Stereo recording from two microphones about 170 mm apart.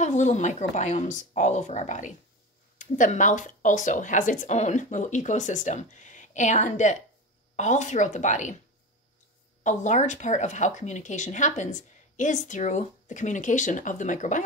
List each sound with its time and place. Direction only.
0.0 s speech: 45° left (ahead or behind)
9.6 s speech: 45° left (ahead or behind)